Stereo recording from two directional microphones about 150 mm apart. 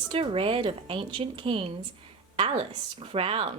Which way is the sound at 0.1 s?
35° right (ahead or behind).